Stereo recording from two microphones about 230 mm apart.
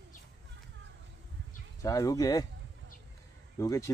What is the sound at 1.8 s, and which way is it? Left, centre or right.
Speech, centre.